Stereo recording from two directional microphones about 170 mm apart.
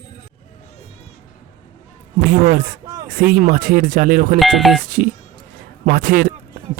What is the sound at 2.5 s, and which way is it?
Speech, 55° right (ahead or behind).